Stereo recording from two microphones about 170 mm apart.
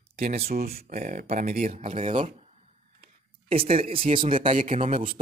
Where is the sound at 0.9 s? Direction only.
55° right (ahead or behind).